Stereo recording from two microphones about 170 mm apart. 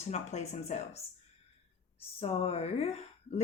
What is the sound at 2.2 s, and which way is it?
A woman's voice, 35° left (ahead or behind).